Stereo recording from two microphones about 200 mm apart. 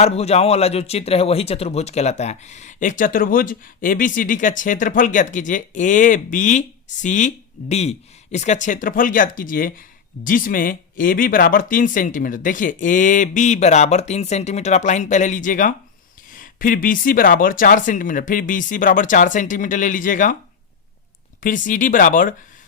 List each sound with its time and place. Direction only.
0.0 s speech: 30° left (ahead or behind)
21.4 s speech: 40° left (ahead or behind)